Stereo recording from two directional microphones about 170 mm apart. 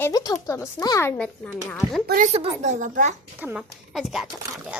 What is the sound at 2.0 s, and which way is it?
A woman's voice, 55° right (ahead or behind).